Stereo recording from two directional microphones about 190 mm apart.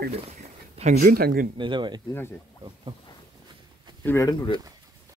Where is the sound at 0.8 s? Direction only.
35° right (ahead or behind).